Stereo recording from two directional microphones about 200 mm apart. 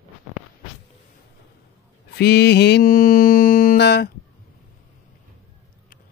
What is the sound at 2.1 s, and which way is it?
Mantra, 55° left (ahead or behind).